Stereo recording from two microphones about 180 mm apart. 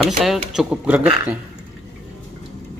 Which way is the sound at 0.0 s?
Centre (ahead or behind).